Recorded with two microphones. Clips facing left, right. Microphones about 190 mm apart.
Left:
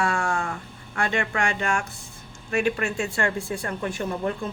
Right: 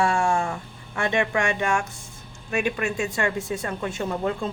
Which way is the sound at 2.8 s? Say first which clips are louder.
Right 1 dB; 20° right (ahead or behind).